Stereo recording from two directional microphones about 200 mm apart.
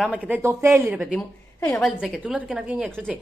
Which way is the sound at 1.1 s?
10° left (ahead or behind).